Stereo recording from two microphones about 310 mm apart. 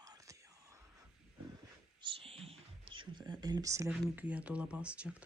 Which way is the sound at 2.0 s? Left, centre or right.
Centre.